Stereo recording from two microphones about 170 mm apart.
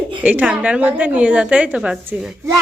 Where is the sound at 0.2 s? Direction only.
10° right (ahead or behind).